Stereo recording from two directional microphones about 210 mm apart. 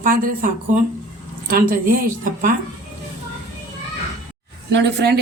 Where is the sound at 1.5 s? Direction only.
45° right (ahead or behind).